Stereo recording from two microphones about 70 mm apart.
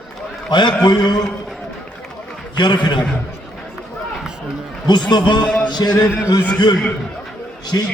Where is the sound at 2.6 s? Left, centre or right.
Left.